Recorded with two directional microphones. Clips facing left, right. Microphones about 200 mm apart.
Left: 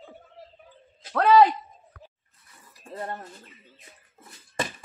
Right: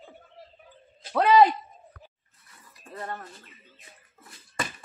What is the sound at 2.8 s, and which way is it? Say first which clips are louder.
Speech: left 2 dB; 30° left (ahead or behind).